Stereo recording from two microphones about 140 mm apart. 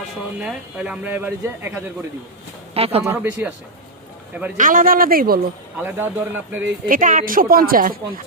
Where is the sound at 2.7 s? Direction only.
45° right (ahead or behind).